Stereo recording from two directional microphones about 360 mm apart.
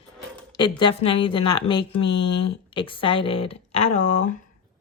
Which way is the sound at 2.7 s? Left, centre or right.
Centre.